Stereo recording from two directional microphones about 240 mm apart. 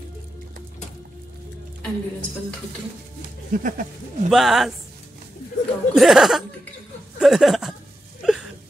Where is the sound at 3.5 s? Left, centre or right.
Right.